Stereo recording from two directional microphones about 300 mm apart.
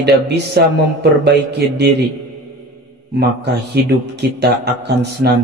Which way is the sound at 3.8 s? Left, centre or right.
Right.